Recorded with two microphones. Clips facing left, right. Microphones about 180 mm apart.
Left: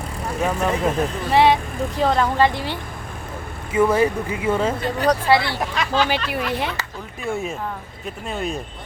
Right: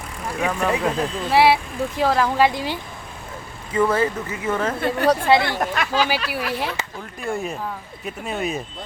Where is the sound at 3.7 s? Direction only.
10° left (ahead or behind).